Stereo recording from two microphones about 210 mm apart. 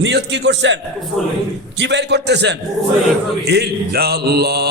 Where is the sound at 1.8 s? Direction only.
55° right (ahead or behind).